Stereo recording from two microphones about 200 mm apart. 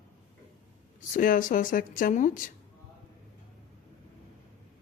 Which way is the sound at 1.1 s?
40° left (ahead or behind).